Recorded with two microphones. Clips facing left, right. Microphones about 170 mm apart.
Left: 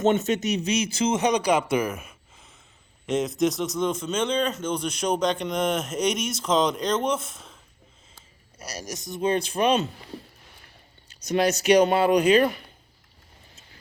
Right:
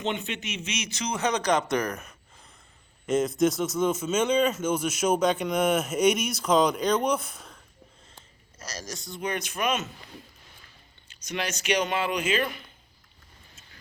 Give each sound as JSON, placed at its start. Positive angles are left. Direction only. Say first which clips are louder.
{"t": 0.0, "sound": "speech", "louder": "left 9 dB", "side_deg": 45}
{"t": 8.5, "sound": "speech", "louder": "left 3 dB", "side_deg": 15}
{"t": 11.3, "sound": "speech", "louder": "left 9 dB", "side_deg": 35}